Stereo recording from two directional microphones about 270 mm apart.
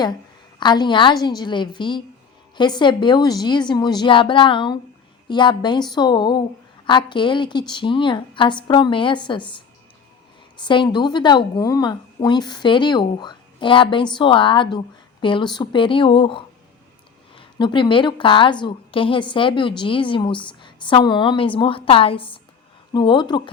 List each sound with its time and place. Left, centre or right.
0.6 s a woman's voice: centre